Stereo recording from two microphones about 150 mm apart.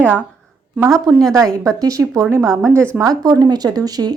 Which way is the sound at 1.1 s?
5° left (ahead or behind).